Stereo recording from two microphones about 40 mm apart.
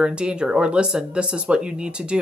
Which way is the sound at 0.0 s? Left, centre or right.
Right.